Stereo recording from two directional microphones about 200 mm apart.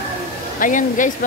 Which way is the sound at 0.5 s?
40° left (ahead or behind).